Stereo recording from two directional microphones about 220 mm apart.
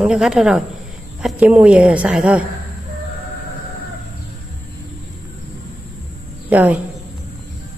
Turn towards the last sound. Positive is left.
turn(degrees=-5)  # may be behind; listen again after turning